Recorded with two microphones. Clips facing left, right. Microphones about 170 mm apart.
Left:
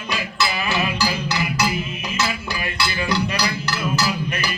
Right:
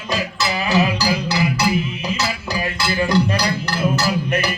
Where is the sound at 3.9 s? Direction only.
60° right (ahead or behind).